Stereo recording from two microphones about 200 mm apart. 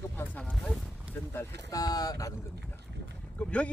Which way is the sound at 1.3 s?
15° left (ahead or behind).